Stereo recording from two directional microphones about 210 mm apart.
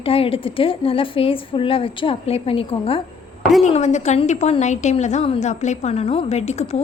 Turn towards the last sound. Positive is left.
turn(degrees=30)  # may be behind; listen again after turning